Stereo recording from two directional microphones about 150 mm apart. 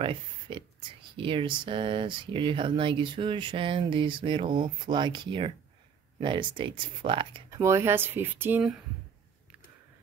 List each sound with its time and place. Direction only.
0.0 s speech: 35° right (ahead or behind)
7.5 s speech: 20° right (ahead or behind)